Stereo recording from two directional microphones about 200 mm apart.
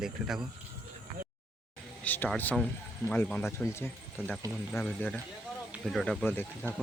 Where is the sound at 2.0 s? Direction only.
10° left (ahead or behind).